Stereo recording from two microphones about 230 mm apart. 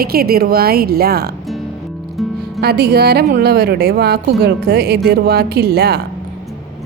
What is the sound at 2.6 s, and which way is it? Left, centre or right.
A woman's voice, right.